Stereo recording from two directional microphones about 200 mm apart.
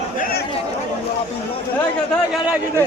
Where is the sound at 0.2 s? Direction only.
50° left (ahead or behind).